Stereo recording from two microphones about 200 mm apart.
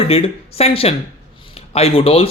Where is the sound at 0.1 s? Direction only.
30° left (ahead or behind).